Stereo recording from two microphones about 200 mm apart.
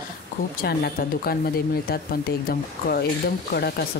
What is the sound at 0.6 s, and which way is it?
A woman's voice, 50° left (ahead or behind).